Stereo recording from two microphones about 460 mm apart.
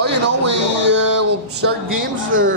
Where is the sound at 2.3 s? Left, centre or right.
Right.